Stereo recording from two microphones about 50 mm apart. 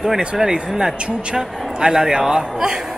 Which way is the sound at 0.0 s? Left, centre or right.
Centre.